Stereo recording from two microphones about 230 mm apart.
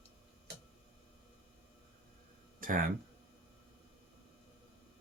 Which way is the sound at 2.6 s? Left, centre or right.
Right.